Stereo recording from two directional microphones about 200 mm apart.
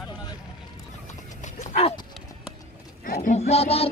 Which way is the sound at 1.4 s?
35° left (ahead or behind).